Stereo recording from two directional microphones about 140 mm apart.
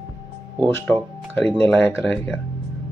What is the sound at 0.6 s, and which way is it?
Speech, 15° left (ahead or behind).